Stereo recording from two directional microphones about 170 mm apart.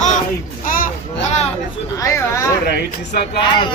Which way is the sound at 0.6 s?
55° left (ahead or behind).